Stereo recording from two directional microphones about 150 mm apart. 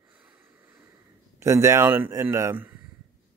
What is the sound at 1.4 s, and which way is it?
A man's voice, 20° right (ahead or behind).